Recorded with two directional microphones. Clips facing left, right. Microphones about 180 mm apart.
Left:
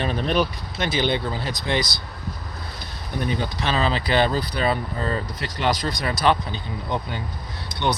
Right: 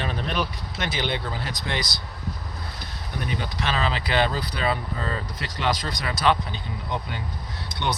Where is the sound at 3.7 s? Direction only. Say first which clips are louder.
Left 4 dB; 30° left (ahead or behind).